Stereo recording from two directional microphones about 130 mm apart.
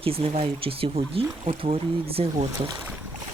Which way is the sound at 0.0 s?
45° right (ahead or behind).